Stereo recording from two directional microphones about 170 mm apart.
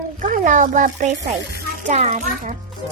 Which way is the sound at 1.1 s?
90° right.